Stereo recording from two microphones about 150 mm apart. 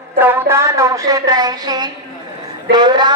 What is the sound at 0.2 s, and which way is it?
A woman's voice, 15° right (ahead or behind).